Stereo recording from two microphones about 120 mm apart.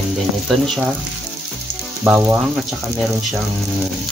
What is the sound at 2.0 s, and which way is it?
Speech, 15° right (ahead or behind).